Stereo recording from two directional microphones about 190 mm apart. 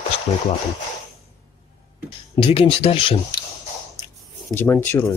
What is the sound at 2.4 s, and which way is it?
Speech, 30° left (ahead or behind).